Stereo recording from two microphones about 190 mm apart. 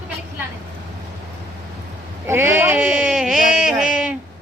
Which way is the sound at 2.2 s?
10° right (ahead or behind).